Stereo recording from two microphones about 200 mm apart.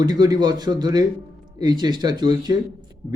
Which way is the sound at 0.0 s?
20° right (ahead or behind).